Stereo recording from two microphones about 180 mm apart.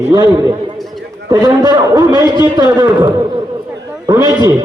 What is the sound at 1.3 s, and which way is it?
Speech, 20° right (ahead or behind).